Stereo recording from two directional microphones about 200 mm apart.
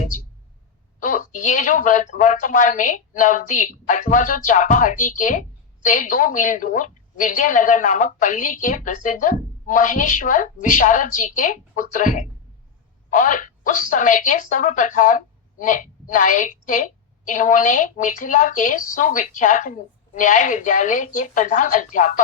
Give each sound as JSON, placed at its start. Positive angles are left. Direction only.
{"t": 0.9, "sound": "speech", "side_deg": 40}